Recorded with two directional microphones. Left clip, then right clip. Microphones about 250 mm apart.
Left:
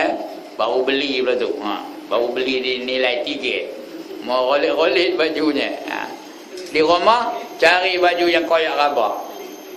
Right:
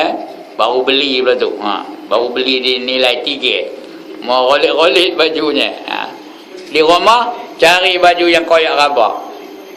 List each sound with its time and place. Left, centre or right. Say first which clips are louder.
0.5 s a man's voice: right 7 dB; right